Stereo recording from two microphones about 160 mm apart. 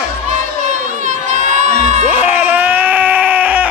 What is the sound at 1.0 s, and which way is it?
Music, 50° right (ahead or behind).